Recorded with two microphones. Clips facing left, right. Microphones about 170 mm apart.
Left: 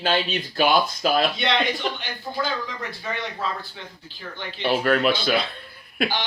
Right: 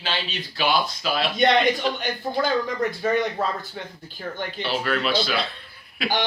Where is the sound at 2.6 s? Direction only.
45° right (ahead or behind).